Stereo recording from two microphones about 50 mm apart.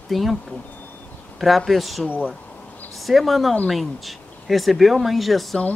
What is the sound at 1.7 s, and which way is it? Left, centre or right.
Speech, centre.